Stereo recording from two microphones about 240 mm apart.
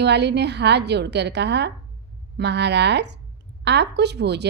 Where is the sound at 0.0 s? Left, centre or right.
Right.